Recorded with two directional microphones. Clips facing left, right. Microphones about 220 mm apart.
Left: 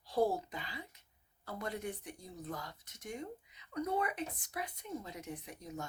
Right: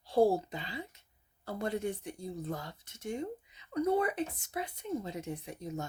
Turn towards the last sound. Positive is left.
turn(degrees=-25)  # may be behind; listen again after turning